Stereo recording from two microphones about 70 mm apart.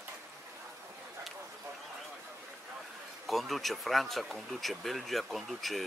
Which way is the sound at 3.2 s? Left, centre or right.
Centre.